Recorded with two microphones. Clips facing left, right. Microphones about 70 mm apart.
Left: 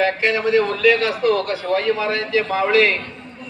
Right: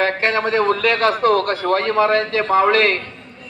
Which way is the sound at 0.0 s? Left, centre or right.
Right.